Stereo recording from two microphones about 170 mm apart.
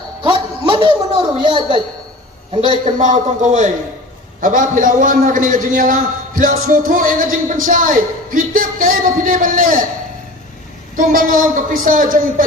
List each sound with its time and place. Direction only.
0.2 s a sound: 30° right (ahead or behind)
3.0 s a man's voice: 50° right (ahead or behind)
10.9 s a man's voice: 55° right (ahead or behind)